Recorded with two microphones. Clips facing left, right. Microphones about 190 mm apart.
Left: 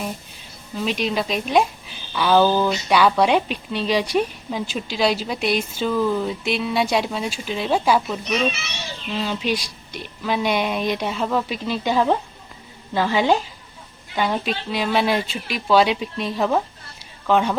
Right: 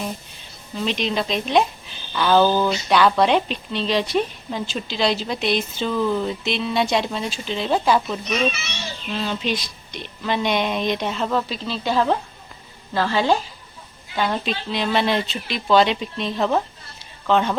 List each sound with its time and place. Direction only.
0.8 s speech: 5° left (ahead or behind)